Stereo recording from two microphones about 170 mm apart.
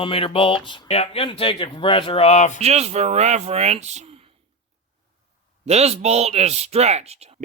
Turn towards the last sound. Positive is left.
turn(degrees=-40)  # may be behind; listen again after turning